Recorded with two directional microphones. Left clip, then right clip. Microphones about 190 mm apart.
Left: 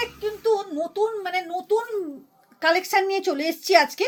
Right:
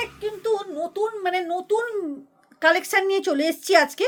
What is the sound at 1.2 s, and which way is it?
A woman's voice, 25° right (ahead or behind).